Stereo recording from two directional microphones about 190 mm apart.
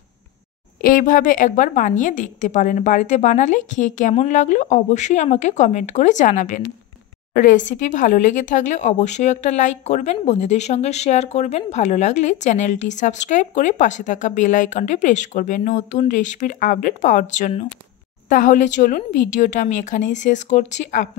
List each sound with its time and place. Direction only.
0.7 s speech: 45° left (ahead or behind)